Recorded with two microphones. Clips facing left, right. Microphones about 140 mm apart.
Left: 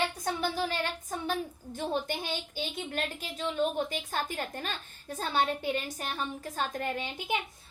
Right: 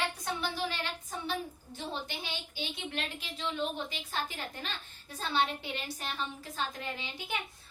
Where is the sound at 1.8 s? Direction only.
50° left (ahead or behind).